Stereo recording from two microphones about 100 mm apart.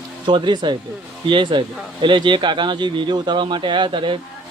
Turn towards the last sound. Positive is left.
turn(degrees=-55)  # may be behind; listen again after turning